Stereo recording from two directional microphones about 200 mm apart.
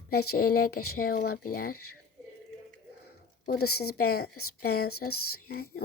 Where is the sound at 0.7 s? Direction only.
90° left.